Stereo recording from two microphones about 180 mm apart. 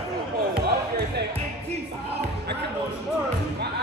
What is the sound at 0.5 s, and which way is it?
Basketball bounce, 65° right (ahead or behind).